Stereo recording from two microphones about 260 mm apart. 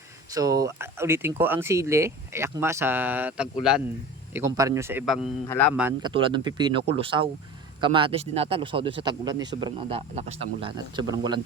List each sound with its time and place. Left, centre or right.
0.3 s speech: centre
6.0 s speech: centre